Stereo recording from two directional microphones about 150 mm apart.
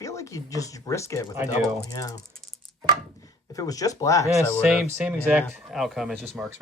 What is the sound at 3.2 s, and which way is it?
Speech, 25° left (ahead or behind).